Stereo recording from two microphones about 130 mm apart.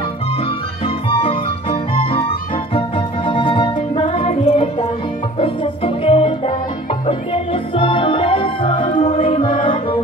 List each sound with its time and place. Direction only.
0.8 s music: 45° left (ahead or behind)